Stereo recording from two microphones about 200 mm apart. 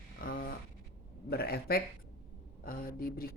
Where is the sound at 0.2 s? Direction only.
45° left (ahead or behind).